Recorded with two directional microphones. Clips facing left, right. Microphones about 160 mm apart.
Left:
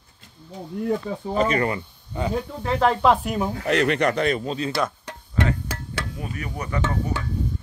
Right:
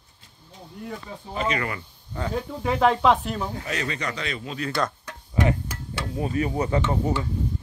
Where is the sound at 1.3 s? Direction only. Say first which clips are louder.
Left 5 dB; 40° left (ahead or behind).